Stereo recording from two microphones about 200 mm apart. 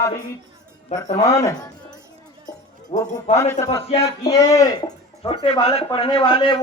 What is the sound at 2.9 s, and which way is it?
Speech, 30° left (ahead or behind).